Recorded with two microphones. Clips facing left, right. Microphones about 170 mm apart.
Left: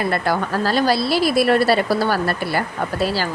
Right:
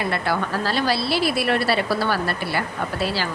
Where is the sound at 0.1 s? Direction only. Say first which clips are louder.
Left 3 dB; 45° left (ahead or behind).